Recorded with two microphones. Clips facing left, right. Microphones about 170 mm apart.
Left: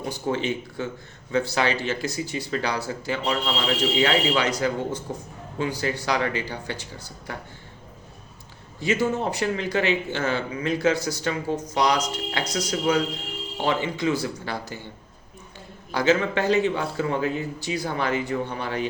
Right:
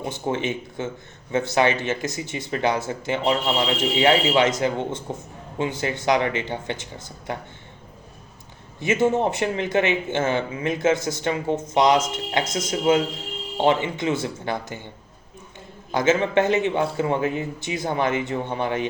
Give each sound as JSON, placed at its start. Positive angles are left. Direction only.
{"t": 0.0, "sound": "speech", "side_deg": -20}
{"t": 8.8, "sound": "speech", "side_deg": -20}
{"t": 15.9, "sound": "speech", "side_deg": -20}